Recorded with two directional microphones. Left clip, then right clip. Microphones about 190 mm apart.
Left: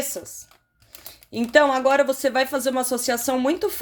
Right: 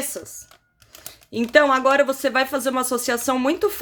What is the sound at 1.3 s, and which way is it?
Speech, 15° right (ahead or behind).